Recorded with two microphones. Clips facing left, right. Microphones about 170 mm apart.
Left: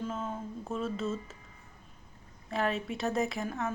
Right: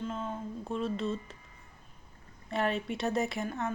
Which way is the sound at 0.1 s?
5° left (ahead or behind).